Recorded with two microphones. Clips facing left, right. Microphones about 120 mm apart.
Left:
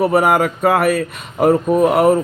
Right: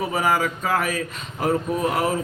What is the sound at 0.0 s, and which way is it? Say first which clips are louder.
Speech: left 8 dB; 60° left (ahead or behind).